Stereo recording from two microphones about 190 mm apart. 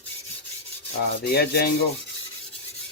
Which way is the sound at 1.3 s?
55° left (ahead or behind).